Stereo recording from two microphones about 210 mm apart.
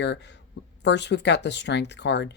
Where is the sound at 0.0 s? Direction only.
55° left (ahead or behind).